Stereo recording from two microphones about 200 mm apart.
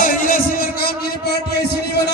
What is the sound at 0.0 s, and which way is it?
Music, 45° left (ahead or behind).